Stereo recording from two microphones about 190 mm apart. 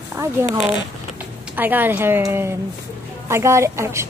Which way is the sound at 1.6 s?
10° right (ahead or behind).